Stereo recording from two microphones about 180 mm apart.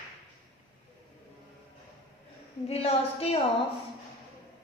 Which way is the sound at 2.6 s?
35° left (ahead or behind).